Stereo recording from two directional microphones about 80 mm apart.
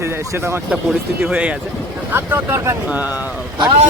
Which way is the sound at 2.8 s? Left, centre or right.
Centre.